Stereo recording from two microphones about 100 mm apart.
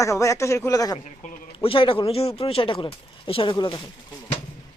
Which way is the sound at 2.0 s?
80° left.